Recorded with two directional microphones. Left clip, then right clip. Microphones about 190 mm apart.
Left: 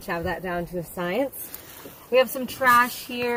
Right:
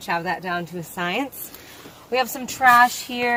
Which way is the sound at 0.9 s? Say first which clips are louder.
Right 3 dB; 15° right (ahead or behind).